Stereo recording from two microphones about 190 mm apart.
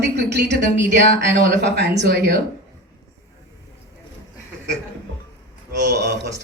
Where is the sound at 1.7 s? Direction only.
60° right (ahead or behind).